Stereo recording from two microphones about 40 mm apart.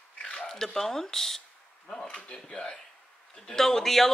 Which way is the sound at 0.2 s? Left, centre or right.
Centre.